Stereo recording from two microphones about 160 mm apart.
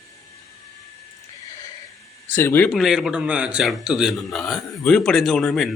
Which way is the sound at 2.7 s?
Centre (ahead or behind).